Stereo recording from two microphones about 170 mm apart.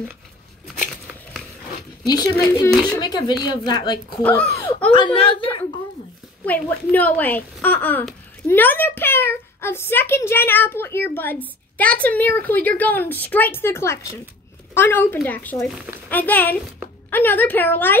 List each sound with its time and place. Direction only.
2.0 s a woman's voice: 25° left (ahead or behind)
4.2 s speech: 10° left (ahead or behind)
4.9 s a woman's voice: 30° left (ahead or behind)
6.4 s speech: 10° left (ahead or behind)
15.7 s speech: 10° right (ahead or behind)
16.1 s speech: 10° left (ahead or behind)